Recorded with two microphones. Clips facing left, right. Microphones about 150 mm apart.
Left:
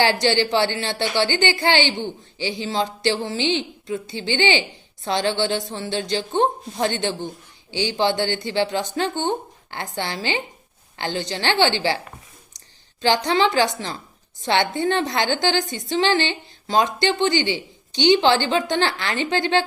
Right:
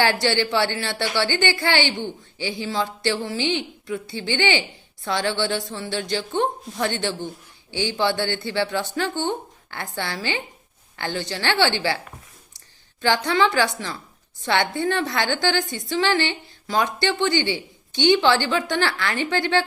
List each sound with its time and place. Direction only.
0.0 s a woman's voice: 20° left (ahead or behind)